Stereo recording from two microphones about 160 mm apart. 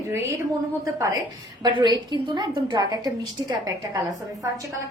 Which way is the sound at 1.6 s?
25° right (ahead or behind).